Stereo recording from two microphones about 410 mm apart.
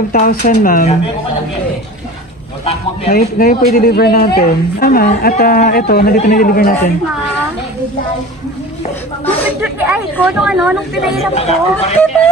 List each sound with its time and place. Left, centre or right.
0.1 s speech: left
2.6 s speech: centre
9.2 s speech: centre
11.3 s speech: centre